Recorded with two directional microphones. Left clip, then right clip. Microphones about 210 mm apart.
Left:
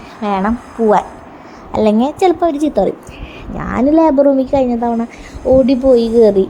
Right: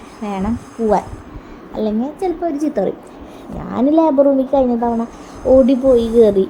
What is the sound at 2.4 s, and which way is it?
A woman's voice, 15° left (ahead or behind).